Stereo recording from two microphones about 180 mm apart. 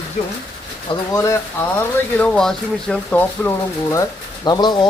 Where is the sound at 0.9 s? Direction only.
20° left (ahead or behind).